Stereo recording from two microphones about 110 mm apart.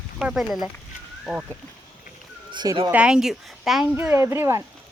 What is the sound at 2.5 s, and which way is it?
Speech, 35° right (ahead or behind).